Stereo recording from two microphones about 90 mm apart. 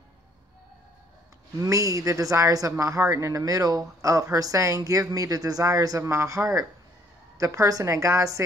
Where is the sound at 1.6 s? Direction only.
35° right (ahead or behind).